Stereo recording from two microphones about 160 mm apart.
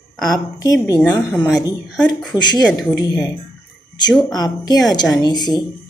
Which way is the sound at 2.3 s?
25° left (ahead or behind).